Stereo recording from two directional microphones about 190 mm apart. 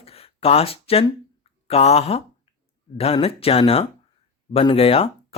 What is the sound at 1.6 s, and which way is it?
Speech, 35° left (ahead or behind).